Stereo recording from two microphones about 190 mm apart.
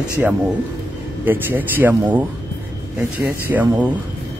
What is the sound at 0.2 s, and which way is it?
Speech, 5° right (ahead or behind).